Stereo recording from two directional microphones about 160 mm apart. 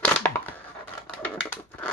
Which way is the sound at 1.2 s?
10° left (ahead or behind).